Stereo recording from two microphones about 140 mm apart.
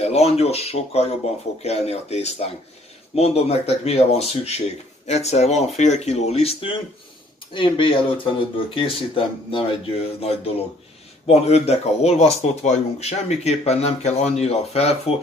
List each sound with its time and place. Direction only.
0.0 s speech: 50° left (ahead or behind)